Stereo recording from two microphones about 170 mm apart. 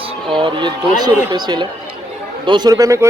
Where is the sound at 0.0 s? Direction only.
30° right (ahead or behind).